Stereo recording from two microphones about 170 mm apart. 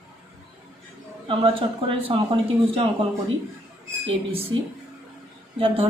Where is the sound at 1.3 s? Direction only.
30° right (ahead or behind).